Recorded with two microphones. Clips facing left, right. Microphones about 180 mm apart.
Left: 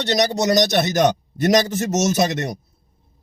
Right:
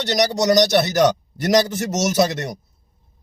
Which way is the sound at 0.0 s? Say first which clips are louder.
Even; 20° left (ahead or behind).